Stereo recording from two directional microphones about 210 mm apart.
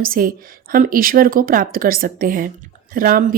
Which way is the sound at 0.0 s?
45° right (ahead or behind).